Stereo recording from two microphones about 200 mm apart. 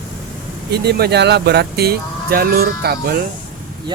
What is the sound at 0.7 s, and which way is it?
Speech, 55° right (ahead or behind).